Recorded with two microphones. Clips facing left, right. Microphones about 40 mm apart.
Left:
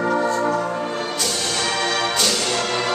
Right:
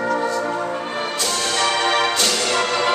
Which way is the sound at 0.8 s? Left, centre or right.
Right.